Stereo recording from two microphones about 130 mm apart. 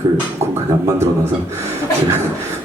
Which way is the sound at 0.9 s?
20° right (ahead or behind).